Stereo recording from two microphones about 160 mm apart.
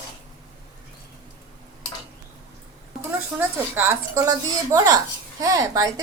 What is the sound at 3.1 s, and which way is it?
A woman's voice, 15° right (ahead or behind).